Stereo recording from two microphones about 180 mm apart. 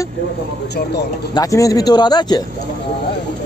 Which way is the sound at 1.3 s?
20° left (ahead or behind).